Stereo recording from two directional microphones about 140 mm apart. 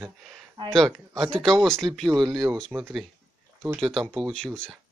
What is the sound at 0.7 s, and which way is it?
Speech, centre (ahead or behind).